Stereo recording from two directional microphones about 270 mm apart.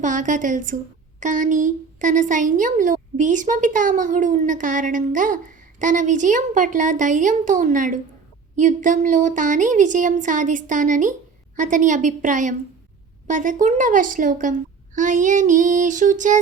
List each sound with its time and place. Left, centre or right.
0.0 s a woman's voice: right